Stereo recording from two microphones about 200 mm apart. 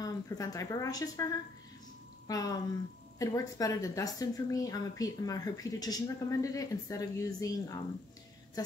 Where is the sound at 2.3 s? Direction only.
20° left (ahead or behind).